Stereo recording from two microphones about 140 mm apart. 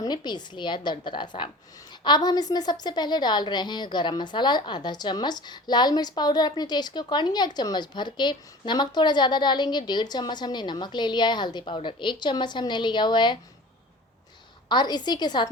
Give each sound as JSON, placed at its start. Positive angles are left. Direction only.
{"t": 0.0, "sound": "a woman's voice", "side_deg": 30}
{"t": 14.7, "sound": "a woman's voice", "side_deg": 30}